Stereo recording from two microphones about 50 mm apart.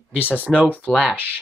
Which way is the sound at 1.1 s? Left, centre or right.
Right.